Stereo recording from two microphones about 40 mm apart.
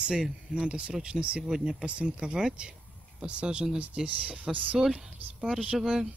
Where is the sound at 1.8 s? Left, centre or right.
Right.